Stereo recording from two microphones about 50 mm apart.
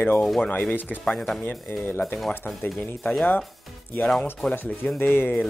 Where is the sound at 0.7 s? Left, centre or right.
Left.